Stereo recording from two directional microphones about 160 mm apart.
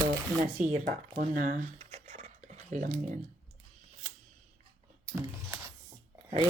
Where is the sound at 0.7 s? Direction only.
60° right (ahead or behind).